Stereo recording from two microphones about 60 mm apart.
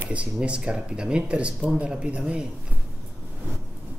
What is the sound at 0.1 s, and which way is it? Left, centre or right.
Speech, centre.